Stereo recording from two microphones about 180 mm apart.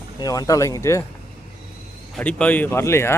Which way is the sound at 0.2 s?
20° left (ahead or behind).